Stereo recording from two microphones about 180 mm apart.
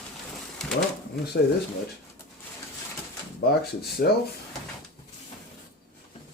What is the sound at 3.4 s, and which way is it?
Speech, 60° left (ahead or behind).